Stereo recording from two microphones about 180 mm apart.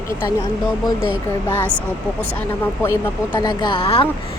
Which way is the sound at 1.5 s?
10° left (ahead or behind).